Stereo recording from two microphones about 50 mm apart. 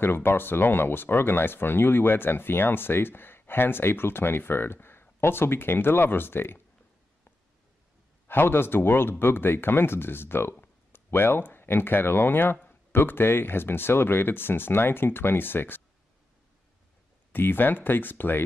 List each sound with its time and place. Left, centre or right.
0.0 s speech: left
8.3 s speech: left
17.3 s speech: left